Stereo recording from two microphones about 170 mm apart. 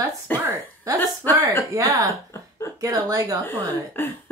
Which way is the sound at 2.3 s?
15° left (ahead or behind).